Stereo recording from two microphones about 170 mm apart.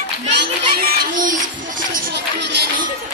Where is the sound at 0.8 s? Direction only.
55° right (ahead or behind).